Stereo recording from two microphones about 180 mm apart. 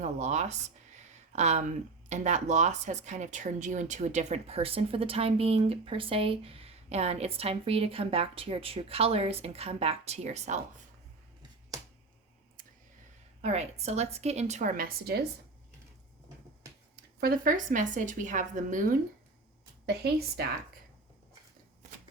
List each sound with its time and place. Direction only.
0.0 s speech: 40° right (ahead or behind)
13.4 s speech: 40° right (ahead or behind); by 15.2 s 55° right (ahead or behind)
17.2 s speech: 55° right (ahead or behind)
19.8 s a woman's voice: 65° right (ahead or behind)